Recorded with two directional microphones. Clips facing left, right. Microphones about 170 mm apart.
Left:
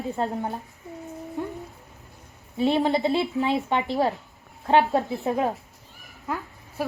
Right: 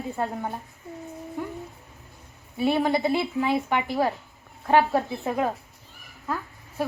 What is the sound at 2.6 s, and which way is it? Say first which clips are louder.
A woman's voice: left 1 dB; 25° left (ahead or behind).